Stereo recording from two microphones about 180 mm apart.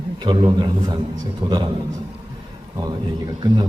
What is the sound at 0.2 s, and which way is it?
A man's voice, 25° right (ahead or behind).